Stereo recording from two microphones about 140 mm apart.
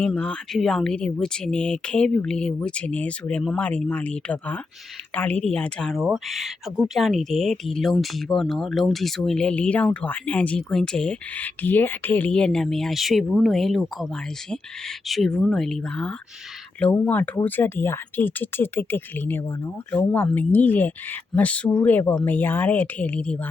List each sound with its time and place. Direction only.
0.0 s speech: 10° left (ahead or behind)